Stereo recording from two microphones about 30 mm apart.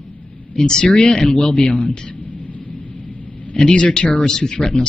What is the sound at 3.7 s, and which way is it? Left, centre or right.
Speech, left.